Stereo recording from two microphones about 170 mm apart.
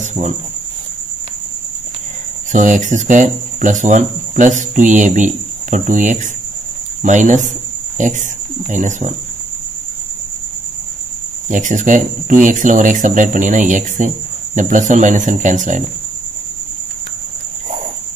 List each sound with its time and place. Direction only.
0.0 s speech: 40° right (ahead or behind)
2.5 s speech: 45° right (ahead or behind)
11.4 s speech: 50° right (ahead or behind)